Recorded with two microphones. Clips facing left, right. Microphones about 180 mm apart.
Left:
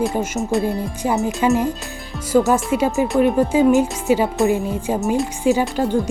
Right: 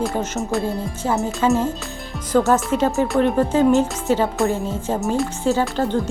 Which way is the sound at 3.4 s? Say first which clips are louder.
Even; 10° left (ahead or behind).